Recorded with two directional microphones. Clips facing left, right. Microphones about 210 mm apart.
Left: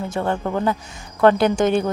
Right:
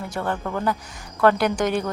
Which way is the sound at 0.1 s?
25° left (ahead or behind).